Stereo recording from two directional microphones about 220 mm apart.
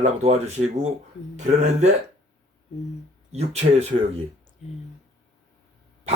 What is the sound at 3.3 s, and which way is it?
Speech, 30° right (ahead or behind).